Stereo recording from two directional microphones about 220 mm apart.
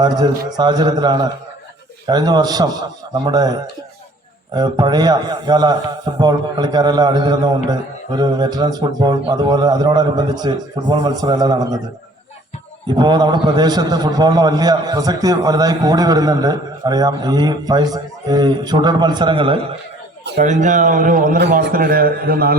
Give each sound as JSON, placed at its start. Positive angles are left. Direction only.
{"t": 0.0, "sound": "a man's voice", "side_deg": -20}
{"t": 12.9, "sound": "a man's voice", "side_deg": -20}
{"t": 20.4, "sound": "a man's voice", "side_deg": -35}